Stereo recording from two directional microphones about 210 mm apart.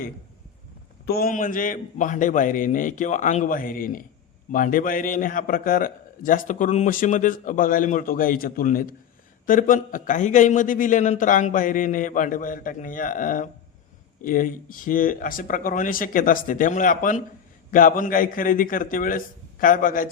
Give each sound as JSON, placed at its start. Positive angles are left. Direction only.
{"t": 1.0, "sound": "a man's voice", "side_deg": 45}